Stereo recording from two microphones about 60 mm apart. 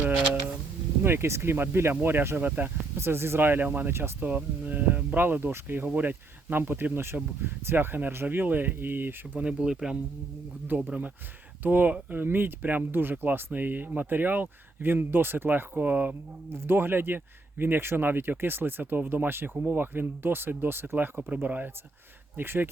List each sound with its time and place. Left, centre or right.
0.0 s a sound: right
1.0 s speech: right
9.4 s speech: centre
16.5 s speech: right